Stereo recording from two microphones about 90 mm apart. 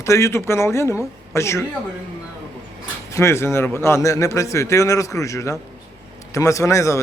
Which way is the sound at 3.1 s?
30° left (ahead or behind).